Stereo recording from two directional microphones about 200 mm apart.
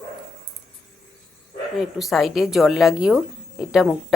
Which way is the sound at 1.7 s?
Centre (ahead or behind).